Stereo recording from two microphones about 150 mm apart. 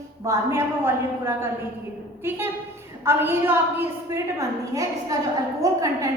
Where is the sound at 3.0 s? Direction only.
15° right (ahead or behind).